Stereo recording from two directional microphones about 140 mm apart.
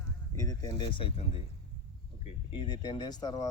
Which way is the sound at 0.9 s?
40° left (ahead or behind).